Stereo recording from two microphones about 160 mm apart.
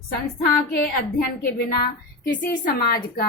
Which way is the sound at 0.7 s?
75° left (ahead or behind).